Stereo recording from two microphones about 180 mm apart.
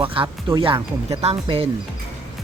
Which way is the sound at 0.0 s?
30° right (ahead or behind).